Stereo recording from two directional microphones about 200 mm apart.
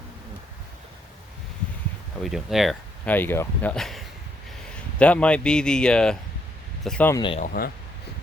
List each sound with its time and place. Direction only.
2.2 s speech: centre (ahead or behind)
7.1 s speech: 25° left (ahead or behind)
7.3 s speech: 45° left (ahead or behind)